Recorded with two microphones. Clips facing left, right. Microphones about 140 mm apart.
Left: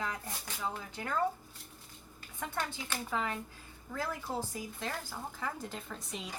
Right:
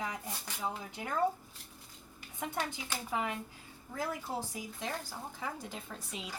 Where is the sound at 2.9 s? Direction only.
15° right (ahead or behind).